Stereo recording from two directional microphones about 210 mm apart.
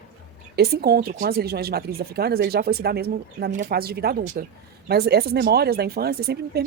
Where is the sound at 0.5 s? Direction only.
50° right (ahead or behind).